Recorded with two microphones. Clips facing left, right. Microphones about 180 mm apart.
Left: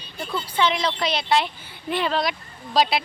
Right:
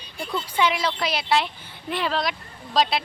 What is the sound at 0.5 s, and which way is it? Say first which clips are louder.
A woman's voice: left 1 dB; 10° right (ahead or behind).